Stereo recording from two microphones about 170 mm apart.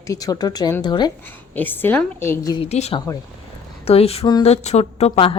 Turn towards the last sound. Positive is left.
turn(degrees=35)  # may be behind; listen again after turning